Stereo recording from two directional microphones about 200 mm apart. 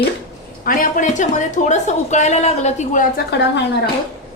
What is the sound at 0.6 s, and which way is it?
Speech, 45° left (ahead or behind).